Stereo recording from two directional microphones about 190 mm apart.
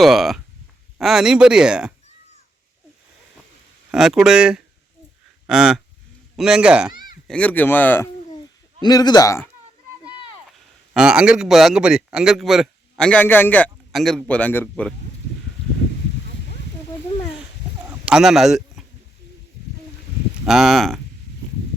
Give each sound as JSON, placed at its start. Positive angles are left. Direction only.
{"t": 0.0, "sound": "a man's voice", "side_deg": 0}
{"t": 3.9, "sound": "a man's voice", "side_deg": 0}
{"t": 7.3, "sound": "a man's voice", "side_deg": 10}
{"t": 10.9, "sound": "a man's voice", "side_deg": -5}
{"t": 17.8, "sound": "a sound", "side_deg": -5}
{"t": 20.4, "sound": "a man's voice", "side_deg": 0}